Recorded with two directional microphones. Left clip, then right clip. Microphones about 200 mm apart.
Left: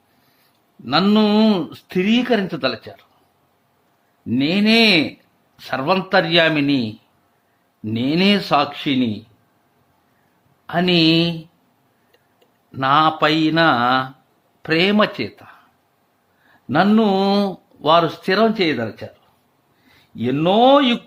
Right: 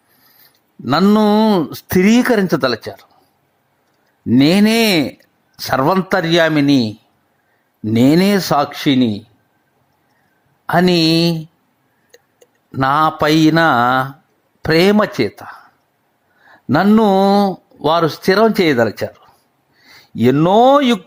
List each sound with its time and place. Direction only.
0.9 s speech: 35° right (ahead or behind)
4.4 s speech: 40° right (ahead or behind)
7.9 s speech: 40° right (ahead or behind)
10.7 s speech: 35° right (ahead or behind)
12.7 s speech: 35° right (ahead or behind)
16.6 s speech: 30° right (ahead or behind)
20.1 s speech: 35° right (ahead or behind)